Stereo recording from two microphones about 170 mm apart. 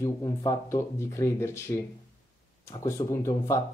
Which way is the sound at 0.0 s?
25° left (ahead or behind).